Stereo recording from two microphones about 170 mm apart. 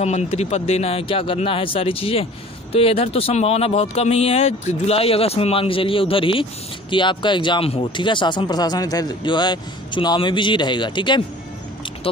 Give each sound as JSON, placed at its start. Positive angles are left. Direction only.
{"t": 0.0, "sound": "speech", "side_deg": 40}